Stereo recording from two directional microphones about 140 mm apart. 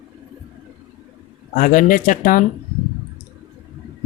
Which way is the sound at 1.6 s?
75° left (ahead or behind).